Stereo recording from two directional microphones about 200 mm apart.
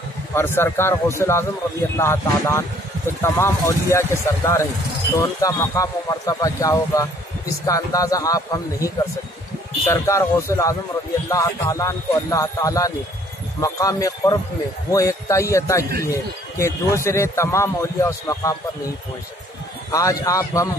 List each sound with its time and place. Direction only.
0.3 s a man's voice: 10° left (ahead or behind)
19.9 s a man's voice: 15° left (ahead or behind)